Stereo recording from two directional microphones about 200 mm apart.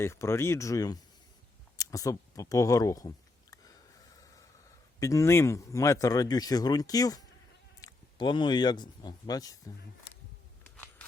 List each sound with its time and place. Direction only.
0.0 s speech: 15° left (ahead or behind)
3.5 s a sound: 20° left (ahead or behind)
4.9 s speech: 15° left (ahead or behind)